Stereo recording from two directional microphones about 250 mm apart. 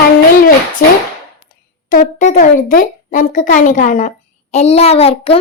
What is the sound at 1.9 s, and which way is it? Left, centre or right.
A child's voice, left.